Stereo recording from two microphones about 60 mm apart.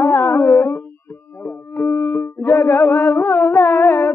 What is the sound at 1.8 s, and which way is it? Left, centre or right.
Music, left.